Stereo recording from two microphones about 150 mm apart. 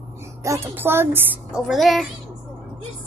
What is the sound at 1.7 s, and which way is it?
Speech, centre (ahead or behind).